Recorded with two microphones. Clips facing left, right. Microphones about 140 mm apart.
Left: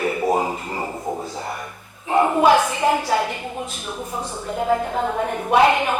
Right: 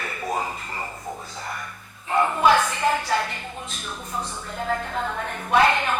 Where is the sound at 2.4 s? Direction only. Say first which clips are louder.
Left 3 dB; 15° left (ahead or behind).